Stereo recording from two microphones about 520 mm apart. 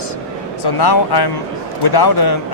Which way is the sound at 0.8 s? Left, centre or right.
Left.